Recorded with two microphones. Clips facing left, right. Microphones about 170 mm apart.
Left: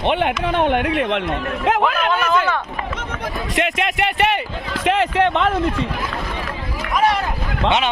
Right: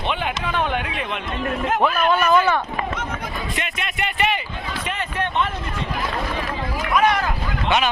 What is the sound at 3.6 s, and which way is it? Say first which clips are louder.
Speech: left 12 dB; 85° left.